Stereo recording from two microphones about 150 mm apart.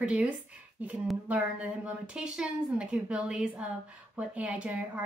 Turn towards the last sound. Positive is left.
turn(degrees=-5)  # may be behind; listen again after turning